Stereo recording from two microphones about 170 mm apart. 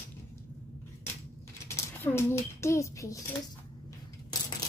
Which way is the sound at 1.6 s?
15° left (ahead or behind).